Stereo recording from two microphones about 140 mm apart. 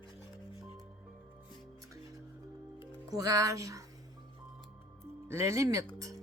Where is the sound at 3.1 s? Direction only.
25° right (ahead or behind).